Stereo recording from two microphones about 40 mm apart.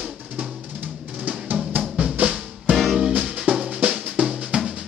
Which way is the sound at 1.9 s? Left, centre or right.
Right.